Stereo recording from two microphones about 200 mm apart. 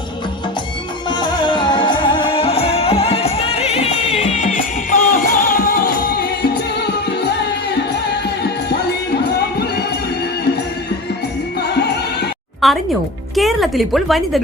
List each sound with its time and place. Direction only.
1.1 s music: 20° left (ahead or behind); by 6.5 s 55° left (ahead or behind)
12.6 s music: centre (ahead or behind)
13.3 s speech: centre (ahead or behind)